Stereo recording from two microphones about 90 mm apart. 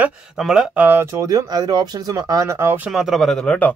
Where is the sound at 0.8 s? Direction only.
25° right (ahead or behind).